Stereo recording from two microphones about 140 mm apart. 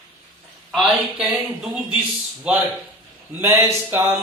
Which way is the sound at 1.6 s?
5° right (ahead or behind).